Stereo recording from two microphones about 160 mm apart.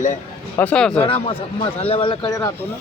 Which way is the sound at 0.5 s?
5° left (ahead or behind).